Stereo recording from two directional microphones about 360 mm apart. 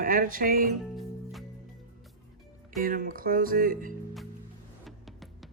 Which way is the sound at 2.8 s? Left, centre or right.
Right.